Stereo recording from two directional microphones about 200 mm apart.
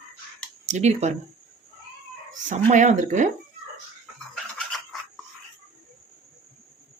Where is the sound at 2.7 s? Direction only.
35° right (ahead or behind).